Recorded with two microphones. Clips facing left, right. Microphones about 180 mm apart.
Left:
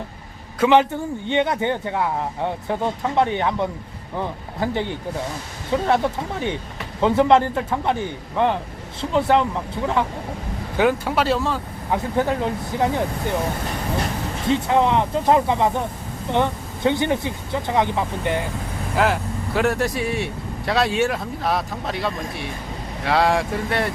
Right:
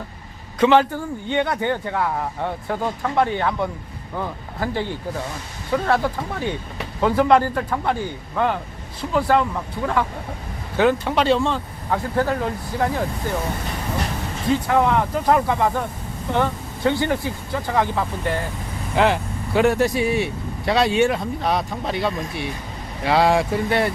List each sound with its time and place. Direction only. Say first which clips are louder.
0.6 s speech: even; 20° left (ahead or behind)
10.8 s speech: right 1 dB; 10° left (ahead or behind)
11.9 s speech: even; 20° left (ahead or behind)
14.4 s speech: even; 20° left (ahead or behind)
18.9 s speech: right 2 dB; centre (ahead or behind)